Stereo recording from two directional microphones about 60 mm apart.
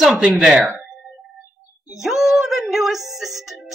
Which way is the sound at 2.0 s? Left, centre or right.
Centre.